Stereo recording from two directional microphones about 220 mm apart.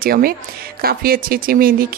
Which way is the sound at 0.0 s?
40° right (ahead or behind).